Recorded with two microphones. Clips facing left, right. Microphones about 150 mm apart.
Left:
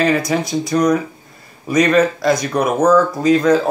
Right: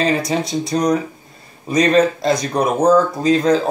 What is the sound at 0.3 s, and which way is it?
Speech, 30° right (ahead or behind).